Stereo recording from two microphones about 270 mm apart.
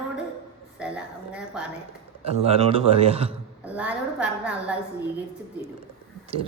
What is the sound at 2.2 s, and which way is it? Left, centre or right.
A man's voice, right.